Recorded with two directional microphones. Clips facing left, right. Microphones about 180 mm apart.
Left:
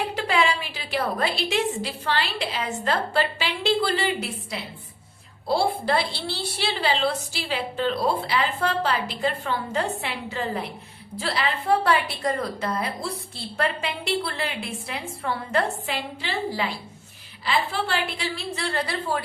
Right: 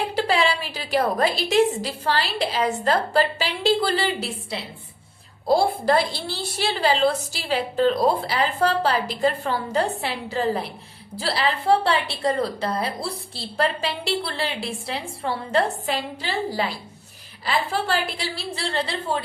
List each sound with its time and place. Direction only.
0.1 s a woman's voice: 35° right (ahead or behind)